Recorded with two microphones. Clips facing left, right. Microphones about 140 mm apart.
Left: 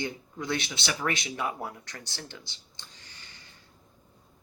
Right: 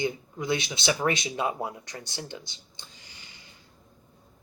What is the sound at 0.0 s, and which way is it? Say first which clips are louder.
Speech: right 4 dB; 10° right (ahead or behind).